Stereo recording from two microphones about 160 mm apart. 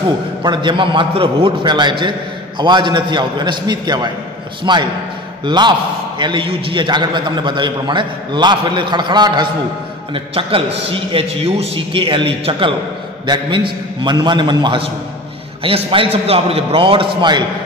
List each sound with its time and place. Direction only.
0.4 s a man's voice: 30° right (ahead or behind)